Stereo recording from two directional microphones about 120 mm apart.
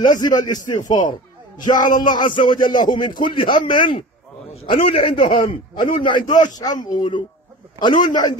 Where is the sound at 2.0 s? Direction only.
40° left (ahead or behind).